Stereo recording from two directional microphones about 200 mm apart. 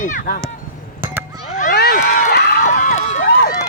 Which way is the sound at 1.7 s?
50° left (ahead or behind).